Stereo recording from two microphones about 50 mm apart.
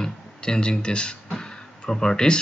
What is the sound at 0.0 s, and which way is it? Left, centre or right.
Music, centre.